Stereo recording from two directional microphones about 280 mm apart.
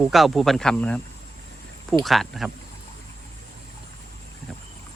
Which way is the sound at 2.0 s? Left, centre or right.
Centre.